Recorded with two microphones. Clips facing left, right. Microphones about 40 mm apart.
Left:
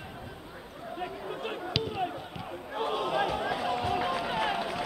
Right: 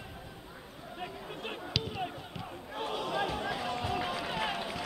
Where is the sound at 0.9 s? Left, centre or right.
Centre.